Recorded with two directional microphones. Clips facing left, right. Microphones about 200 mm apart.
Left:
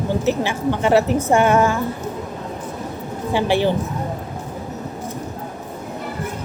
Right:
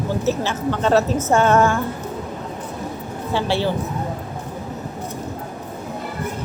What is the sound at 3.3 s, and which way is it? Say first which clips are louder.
Speech: left 3 dB; 15° left (ahead or behind).